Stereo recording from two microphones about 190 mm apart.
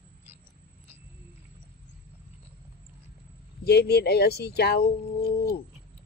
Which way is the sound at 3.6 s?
60° left (ahead or behind).